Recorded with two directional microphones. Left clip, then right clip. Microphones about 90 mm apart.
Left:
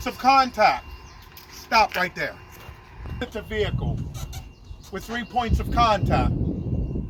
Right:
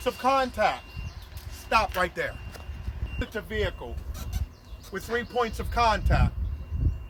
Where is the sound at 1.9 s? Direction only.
35° right (ahead or behind).